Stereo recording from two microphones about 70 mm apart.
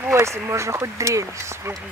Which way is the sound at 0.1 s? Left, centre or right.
Right.